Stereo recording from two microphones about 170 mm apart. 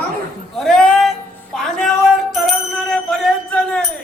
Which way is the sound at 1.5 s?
Centre (ahead or behind).